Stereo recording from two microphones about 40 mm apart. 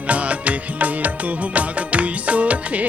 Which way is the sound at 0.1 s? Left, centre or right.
Right.